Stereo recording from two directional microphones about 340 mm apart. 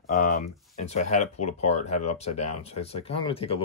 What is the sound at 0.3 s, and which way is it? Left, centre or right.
Speech, centre.